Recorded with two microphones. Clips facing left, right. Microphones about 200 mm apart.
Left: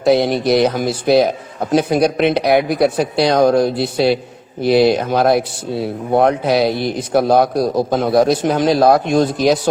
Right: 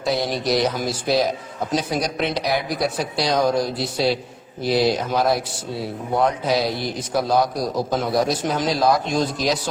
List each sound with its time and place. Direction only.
0.0 s speech: 60° left (ahead or behind)